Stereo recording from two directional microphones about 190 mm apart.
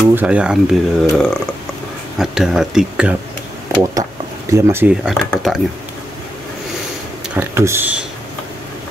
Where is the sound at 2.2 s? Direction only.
Centre (ahead or behind).